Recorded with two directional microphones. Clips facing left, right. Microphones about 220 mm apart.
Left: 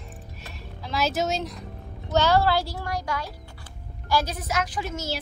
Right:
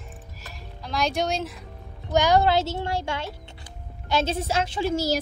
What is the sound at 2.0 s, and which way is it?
A woman's voice, 15° right (ahead or behind).